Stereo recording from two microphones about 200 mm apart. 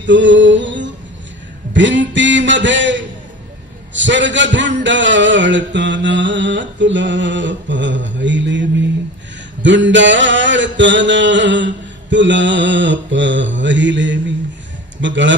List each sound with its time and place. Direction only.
0.0 s a man's voice: 65° right (ahead or behind)